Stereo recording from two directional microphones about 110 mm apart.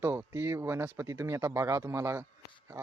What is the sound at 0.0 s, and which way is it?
Speech, 20° right (ahead or behind).